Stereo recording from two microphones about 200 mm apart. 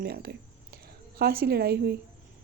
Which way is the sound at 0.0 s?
50° right (ahead or behind).